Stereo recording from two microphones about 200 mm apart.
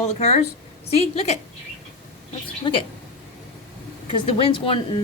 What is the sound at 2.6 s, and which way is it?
Speech, 25° left (ahead or behind).